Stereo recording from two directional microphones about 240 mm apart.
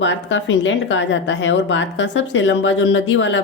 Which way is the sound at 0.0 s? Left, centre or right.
Left.